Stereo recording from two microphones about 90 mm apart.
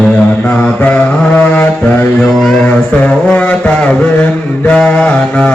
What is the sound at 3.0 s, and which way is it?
Mantra, 15° left (ahead or behind).